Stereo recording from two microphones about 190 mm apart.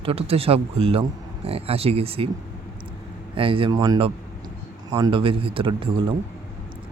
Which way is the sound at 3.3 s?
30° right (ahead or behind).